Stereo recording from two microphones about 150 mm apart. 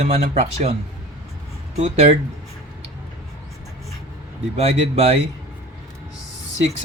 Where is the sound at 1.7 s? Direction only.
45° right (ahead or behind).